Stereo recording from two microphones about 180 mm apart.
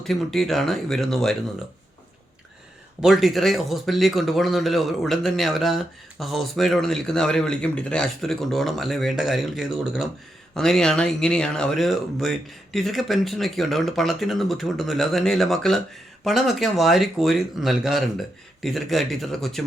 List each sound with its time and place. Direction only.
0.0 s speech: centre (ahead or behind)
3.0 s speech: centre (ahead or behind)